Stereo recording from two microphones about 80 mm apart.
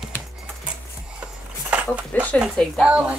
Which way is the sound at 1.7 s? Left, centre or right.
Centre.